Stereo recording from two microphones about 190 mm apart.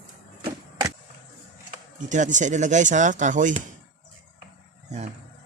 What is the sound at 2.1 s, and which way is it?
Speech, 40° right (ahead or behind).